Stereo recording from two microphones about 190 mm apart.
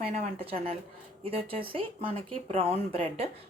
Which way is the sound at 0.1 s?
35° right (ahead or behind).